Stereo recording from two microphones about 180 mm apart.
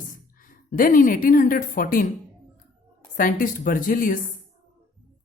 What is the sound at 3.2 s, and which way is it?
A man's voice, 50° left (ahead or behind).